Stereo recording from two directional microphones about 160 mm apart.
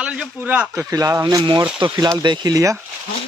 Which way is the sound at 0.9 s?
20° right (ahead or behind).